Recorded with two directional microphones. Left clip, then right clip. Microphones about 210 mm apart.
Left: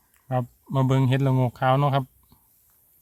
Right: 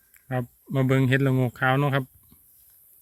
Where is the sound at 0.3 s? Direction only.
20° left (ahead or behind).